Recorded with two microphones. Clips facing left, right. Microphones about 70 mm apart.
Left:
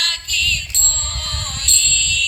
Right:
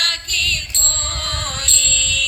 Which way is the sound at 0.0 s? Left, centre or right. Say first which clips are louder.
Even; right.